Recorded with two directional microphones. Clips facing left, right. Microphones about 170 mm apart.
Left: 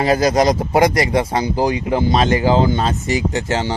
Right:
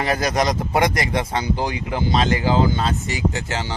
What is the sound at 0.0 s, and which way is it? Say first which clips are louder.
Speech: left 6 dB; 20° left (ahead or behind).